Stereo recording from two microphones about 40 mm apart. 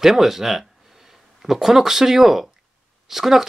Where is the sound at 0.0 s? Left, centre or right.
Centre.